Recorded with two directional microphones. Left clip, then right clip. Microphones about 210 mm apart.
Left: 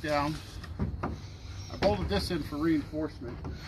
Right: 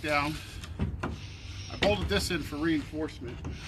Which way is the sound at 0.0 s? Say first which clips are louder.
Right 1 dB; 30° left (ahead or behind).